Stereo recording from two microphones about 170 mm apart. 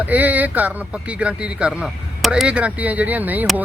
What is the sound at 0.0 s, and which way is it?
Speech, 10° right (ahead or behind).